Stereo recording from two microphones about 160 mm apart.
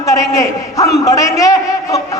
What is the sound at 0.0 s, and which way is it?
A man's voice, 20° left (ahead or behind).